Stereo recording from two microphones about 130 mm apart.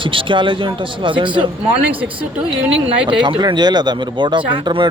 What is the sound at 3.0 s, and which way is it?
A man's voice, 40° right (ahead or behind).